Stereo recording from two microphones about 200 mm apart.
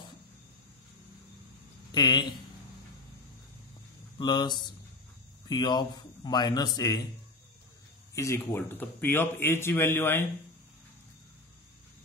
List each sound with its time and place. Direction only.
1.9 s speech: 20° left (ahead or behind)
4.2 s speech: 20° left (ahead or behind)
8.1 s speech: 15° left (ahead or behind)